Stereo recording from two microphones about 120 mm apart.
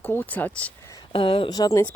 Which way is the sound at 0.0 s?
15° left (ahead or behind).